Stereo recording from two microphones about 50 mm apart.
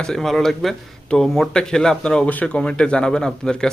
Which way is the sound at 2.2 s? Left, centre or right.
Left.